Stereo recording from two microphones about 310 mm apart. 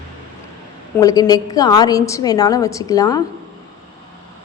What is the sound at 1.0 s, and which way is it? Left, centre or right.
A woman's voice, centre.